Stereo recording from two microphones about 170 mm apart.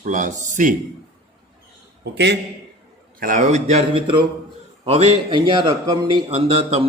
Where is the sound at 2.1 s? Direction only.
80° right.